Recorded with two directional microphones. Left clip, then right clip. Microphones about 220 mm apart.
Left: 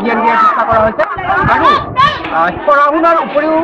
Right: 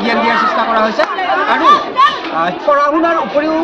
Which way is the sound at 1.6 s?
45° left (ahead or behind).